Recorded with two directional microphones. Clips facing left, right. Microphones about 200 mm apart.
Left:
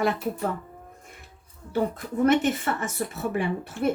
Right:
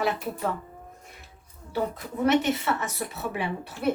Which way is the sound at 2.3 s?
50° left (ahead or behind).